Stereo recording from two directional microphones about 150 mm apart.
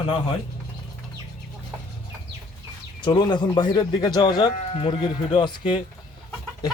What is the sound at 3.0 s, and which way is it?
Speech, 30° left (ahead or behind).